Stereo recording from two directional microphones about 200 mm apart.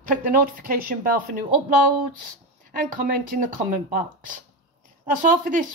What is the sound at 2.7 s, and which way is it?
Speech, 40° right (ahead or behind).